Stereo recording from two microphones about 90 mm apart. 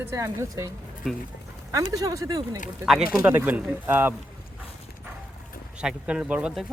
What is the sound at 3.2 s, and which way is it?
Speech, 25° right (ahead or behind).